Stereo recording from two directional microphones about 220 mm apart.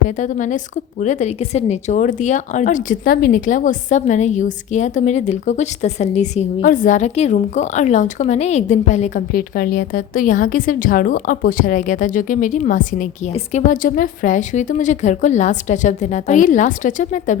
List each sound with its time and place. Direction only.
0.2 s a woman's voice: 35° left (ahead or behind)